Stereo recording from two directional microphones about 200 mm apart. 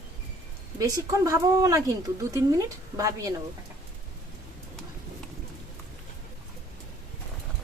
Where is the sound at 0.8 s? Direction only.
15° right (ahead or behind).